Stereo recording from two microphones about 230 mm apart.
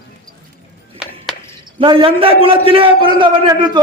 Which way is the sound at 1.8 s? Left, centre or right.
Right.